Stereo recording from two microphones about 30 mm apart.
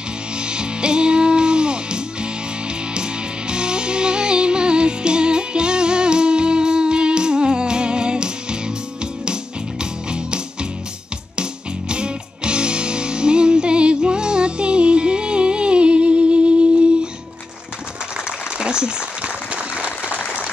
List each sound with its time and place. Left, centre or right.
0.4 s music: right
11.9 s music: right
18.6 s applause: right